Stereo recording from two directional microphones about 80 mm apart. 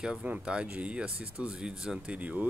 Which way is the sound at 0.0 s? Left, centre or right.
Centre.